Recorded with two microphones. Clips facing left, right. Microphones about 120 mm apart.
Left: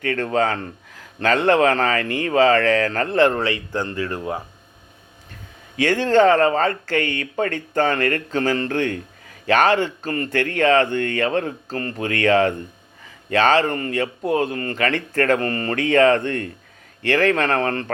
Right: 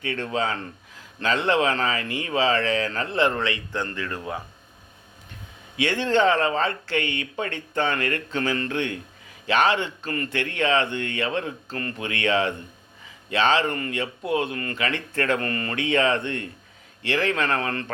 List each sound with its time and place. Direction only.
0.0 s a man's voice: 50° left (ahead or behind); by 4.4 s 30° left (ahead or behind)
5.7 s a man's voice: 45° left (ahead or behind)
14.8 s a man's voice: 45° left (ahead or behind)
15.4 s a man's voice: 35° left (ahead or behind)